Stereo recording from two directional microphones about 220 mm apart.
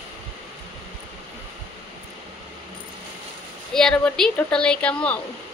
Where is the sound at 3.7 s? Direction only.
5° left (ahead or behind).